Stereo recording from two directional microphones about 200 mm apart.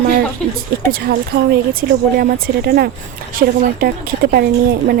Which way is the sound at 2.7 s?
50° right (ahead or behind).